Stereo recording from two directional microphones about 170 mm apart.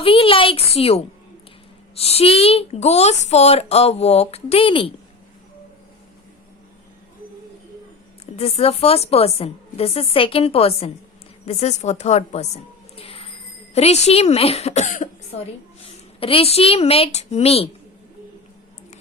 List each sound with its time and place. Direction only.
0.0 s speech: 35° left (ahead or behind)
8.4 s speech: 35° left (ahead or behind)
15.8 s a woman's voice: 35° left (ahead or behind)